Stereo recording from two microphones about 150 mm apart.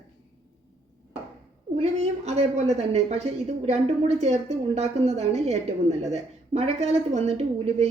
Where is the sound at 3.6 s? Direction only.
45° right (ahead or behind).